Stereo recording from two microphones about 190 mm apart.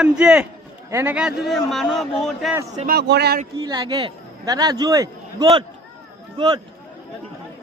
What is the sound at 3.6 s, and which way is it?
A man's voice, 20° right (ahead or behind).